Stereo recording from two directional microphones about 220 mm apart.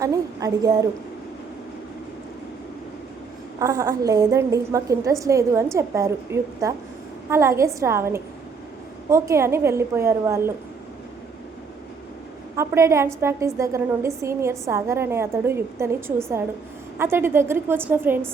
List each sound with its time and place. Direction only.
0.0 s a woman's voice: 15° right (ahead or behind)
3.6 s a woman's voice: 15° right (ahead or behind)
12.5 s a woman's voice: 10° right (ahead or behind)